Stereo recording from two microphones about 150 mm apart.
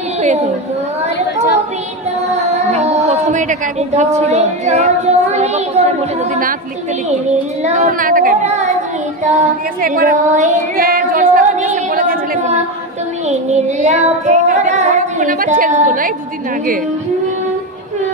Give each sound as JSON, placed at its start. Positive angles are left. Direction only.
{"t": 2.3, "sound": "speech", "side_deg": -50}
{"t": 7.1, "sound": "speech", "side_deg": -50}
{"t": 10.9, "sound": "singing", "side_deg": -65}
{"t": 13.3, "sound": "child singing", "side_deg": -50}